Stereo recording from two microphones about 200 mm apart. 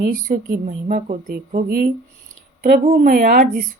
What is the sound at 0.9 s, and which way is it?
Speech, 40° right (ahead or behind).